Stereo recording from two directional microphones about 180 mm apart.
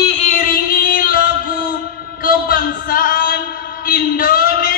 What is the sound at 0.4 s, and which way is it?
Music, 50° left (ahead or behind).